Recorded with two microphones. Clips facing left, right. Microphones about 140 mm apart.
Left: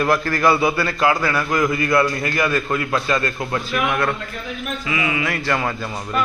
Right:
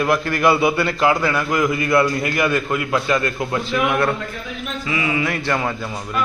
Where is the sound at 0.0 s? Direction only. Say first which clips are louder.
Even; 15° right (ahead or behind).